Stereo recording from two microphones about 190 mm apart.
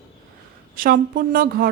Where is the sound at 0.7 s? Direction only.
50° right (ahead or behind).